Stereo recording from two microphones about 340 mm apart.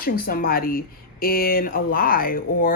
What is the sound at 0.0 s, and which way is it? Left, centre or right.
Speech, left.